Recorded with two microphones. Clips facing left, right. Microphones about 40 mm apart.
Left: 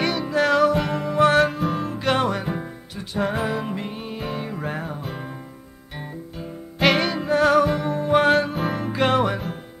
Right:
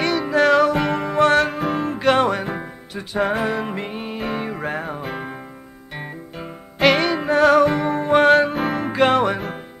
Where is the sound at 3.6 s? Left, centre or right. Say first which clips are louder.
Right 2 dB; right.